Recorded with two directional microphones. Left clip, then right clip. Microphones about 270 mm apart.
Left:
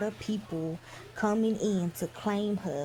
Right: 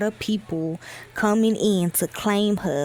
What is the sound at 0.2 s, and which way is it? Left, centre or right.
Speech, right.